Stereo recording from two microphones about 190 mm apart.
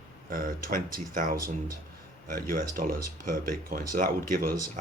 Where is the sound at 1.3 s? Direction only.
15° right (ahead or behind).